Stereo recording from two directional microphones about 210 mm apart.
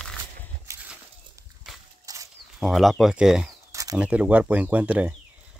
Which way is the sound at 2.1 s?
15° right (ahead or behind).